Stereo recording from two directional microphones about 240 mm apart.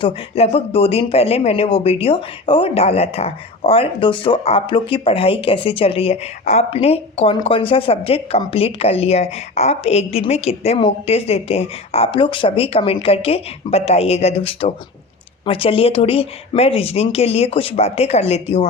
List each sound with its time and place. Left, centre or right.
0.0 s speech: left